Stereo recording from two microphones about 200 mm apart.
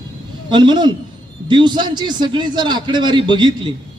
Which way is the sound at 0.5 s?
20° right (ahead or behind).